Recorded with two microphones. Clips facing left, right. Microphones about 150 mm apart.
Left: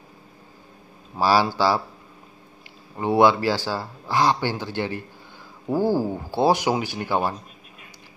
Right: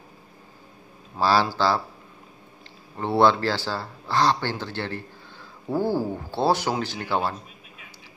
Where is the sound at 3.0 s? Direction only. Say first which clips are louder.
Left 2 dB; 10° left (ahead or behind).